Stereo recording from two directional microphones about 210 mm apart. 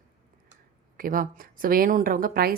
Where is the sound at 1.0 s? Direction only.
40° right (ahead or behind).